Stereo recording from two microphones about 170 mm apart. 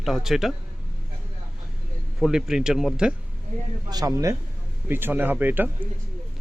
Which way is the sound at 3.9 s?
20° right (ahead or behind).